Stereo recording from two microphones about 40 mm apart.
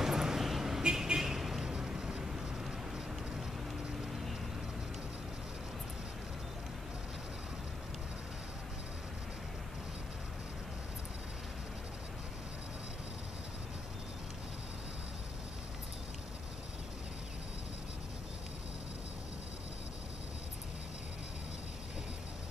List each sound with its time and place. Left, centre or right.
0.0 s vehicle: centre